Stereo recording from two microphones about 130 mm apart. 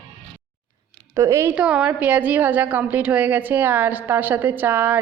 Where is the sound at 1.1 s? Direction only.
25° right (ahead or behind).